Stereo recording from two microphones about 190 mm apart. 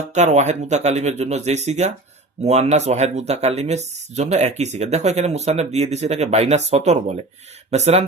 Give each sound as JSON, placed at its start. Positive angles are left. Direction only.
{"t": 0.1, "sound": "speech", "side_deg": -35}